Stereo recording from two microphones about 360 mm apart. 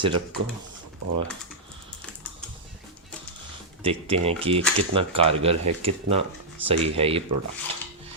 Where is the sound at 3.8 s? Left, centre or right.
Centre.